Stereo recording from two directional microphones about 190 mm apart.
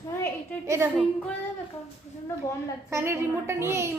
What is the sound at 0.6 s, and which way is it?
Speech, 15° right (ahead or behind).